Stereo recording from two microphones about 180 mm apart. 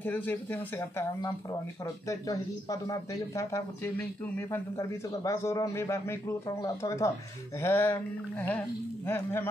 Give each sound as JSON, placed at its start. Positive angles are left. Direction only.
{"t": 0.0, "sound": "speech", "side_deg": 10}